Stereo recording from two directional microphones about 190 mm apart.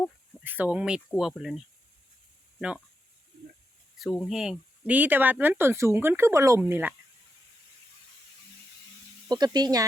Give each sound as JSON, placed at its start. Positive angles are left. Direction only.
{"t": 0.3, "sound": "speech", "side_deg": -10}
{"t": 3.9, "sound": "speech", "side_deg": 5}
{"t": 9.3, "sound": "speech", "side_deg": -20}